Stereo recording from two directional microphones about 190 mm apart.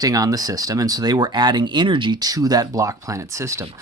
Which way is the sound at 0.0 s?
20° right (ahead or behind).